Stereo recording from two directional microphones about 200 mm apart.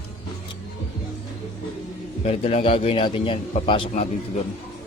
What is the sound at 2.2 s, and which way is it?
Speech, 30° left (ahead or behind).